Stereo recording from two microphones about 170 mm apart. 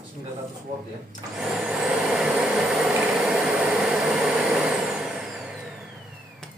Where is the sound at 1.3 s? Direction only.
5° right (ahead or behind).